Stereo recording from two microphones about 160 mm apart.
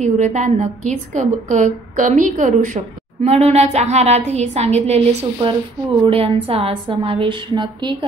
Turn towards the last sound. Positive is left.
turn(degrees=-30)  # may be behind; listen again after turning